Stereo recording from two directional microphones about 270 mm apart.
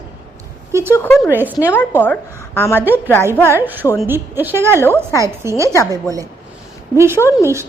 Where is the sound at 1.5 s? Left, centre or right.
Centre.